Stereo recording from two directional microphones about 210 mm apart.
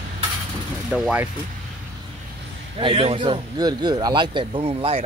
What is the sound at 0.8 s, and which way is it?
Speech, 5° right (ahead or behind).